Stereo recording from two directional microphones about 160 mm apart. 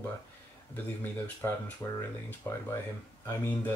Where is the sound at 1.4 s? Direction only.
15° left (ahead or behind).